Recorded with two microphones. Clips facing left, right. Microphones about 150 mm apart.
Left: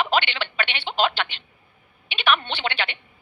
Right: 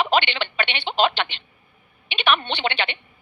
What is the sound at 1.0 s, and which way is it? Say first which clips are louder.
Telephone: right 2 dB; 5° left (ahead or behind).